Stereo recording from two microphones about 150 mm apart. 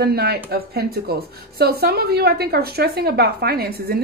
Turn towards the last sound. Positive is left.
turn(degrees=-90)